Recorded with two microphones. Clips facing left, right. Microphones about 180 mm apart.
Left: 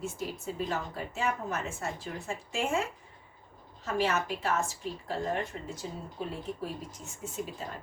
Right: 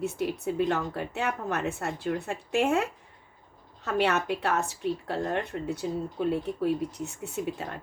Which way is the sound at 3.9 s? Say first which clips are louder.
Right 4 dB; 65° right (ahead or behind).